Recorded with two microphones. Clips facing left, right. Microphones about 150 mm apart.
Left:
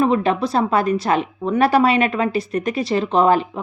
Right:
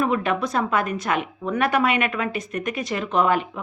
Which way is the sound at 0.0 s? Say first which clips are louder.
Left 5 dB; 30° left (ahead or behind).